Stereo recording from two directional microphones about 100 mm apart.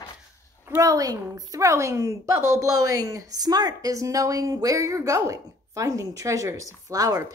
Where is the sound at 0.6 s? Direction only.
30° right (ahead or behind).